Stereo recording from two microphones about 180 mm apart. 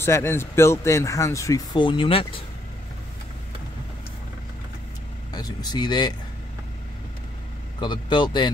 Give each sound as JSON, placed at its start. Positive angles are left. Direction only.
{"t": 0.0, "sound": "speech", "side_deg": 15}
{"t": 5.3, "sound": "speech", "side_deg": 20}
{"t": 7.8, "sound": "speech", "side_deg": 25}